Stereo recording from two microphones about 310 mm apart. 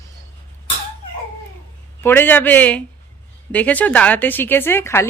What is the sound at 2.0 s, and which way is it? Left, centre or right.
Speech, centre.